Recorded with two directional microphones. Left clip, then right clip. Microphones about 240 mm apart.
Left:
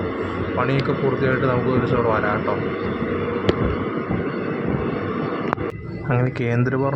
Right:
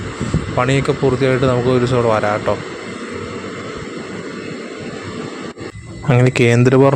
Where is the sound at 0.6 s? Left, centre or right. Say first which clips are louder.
Right 6 dB; right.